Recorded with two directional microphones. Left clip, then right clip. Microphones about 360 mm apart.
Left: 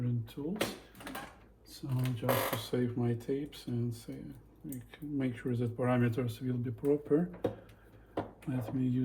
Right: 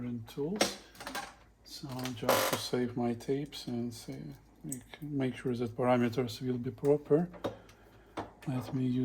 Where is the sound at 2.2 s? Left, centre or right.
Right.